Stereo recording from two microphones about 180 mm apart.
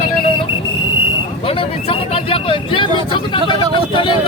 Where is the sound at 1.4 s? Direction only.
30° left (ahead or behind).